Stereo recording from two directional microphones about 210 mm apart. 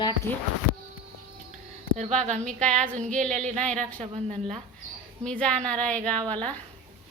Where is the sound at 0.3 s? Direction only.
10° left (ahead or behind).